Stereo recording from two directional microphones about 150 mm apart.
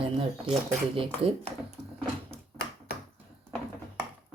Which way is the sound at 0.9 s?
40° right (ahead or behind).